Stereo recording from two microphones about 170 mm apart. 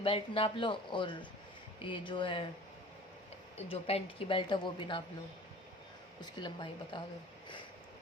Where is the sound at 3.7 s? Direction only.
35° left (ahead or behind).